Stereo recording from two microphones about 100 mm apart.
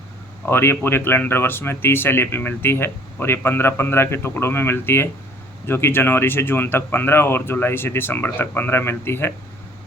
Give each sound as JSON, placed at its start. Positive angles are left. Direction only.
{"t": 0.4, "sound": "speech", "side_deg": 25}